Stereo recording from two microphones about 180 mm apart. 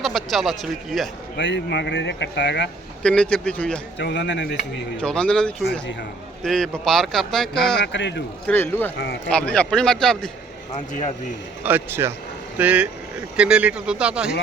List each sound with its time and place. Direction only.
0.0 s speech: centre (ahead or behind)
1.4 s speech: 80° left
3.0 s speech: 5° left (ahead or behind)
3.9 s speech: 80° left
4.9 s speech: 5° left (ahead or behind)
7.9 s speech: 85° left
8.4 s speech: 10° left (ahead or behind)
11.6 s speech: 10° right (ahead or behind)